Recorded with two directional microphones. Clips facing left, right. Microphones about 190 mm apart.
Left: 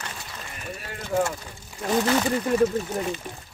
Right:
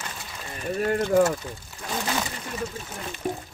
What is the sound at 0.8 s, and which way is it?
Speech, 45° right (ahead or behind).